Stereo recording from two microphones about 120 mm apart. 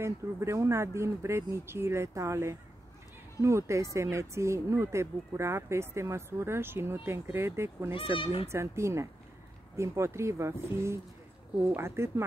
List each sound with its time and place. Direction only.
0.0 s speech: 25° right (ahead or behind)
7.9 s speech: 50° left (ahead or behind)
8.5 s speech: 25° right (ahead or behind)